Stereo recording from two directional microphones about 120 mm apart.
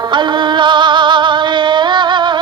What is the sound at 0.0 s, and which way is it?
Music, 40° right (ahead or behind).